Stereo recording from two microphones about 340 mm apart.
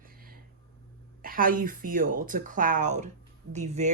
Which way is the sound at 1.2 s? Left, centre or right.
Right.